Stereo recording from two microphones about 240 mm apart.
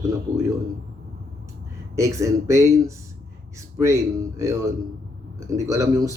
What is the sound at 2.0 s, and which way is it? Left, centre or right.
Speech, centre.